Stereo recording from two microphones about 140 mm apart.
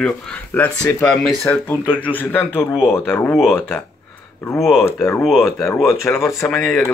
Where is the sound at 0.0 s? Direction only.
10° left (ahead or behind).